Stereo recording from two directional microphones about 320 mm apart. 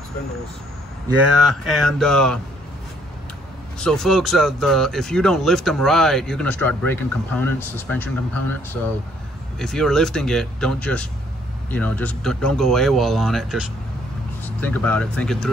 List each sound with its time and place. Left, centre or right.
1.0 s speech: centre
3.8 s speech: centre